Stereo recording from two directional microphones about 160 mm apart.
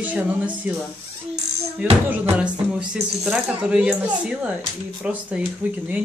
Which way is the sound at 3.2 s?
5° right (ahead or behind).